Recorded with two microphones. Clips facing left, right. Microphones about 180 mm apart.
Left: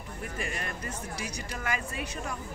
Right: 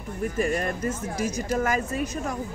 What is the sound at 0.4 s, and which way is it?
A woman's voice, 40° right (ahead or behind).